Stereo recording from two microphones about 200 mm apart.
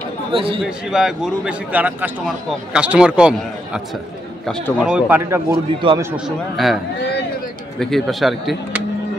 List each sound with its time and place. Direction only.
0.3 s speech: 25° right (ahead or behind)
0.6 s a man's voice: 5° right (ahead or behind)
5.8 s a man's voice: 25° right (ahead or behind)
6.1 s a man's voice: centre (ahead or behind)
7.8 s a man's voice: centre (ahead or behind)